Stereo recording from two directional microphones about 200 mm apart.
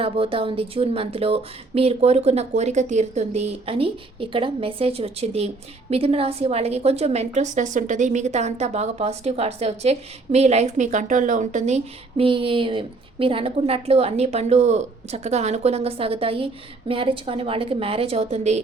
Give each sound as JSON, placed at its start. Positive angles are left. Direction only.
{"t": 0.0, "sound": "a woman's voice", "side_deg": -25}